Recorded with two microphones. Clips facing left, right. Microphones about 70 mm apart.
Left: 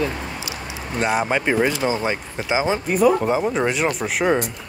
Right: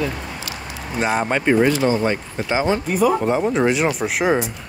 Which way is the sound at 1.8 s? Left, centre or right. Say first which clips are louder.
Right 3 dB; centre.